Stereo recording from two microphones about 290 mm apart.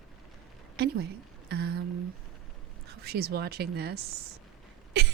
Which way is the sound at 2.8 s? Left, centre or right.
Right.